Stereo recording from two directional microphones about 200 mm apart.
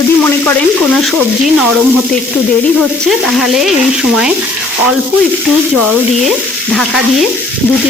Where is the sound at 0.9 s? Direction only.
5° left (ahead or behind).